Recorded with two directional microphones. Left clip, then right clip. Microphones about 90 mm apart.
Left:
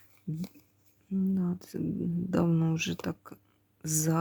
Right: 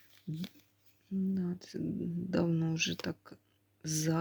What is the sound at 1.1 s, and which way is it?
Speech, 55° left (ahead or behind).